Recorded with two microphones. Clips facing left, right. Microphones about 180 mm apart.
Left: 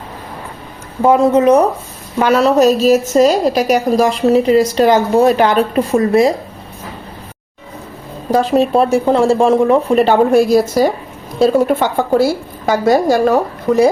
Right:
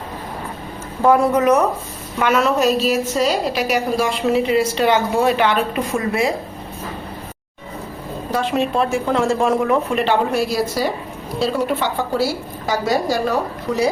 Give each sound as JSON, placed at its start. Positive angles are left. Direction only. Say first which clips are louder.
{"t": 1.0, "sound": "a woman's voice", "louder": "left 4 dB", "side_deg": 20}
{"t": 8.3, "sound": "a woman's voice", "louder": "left 8 dB", "side_deg": 40}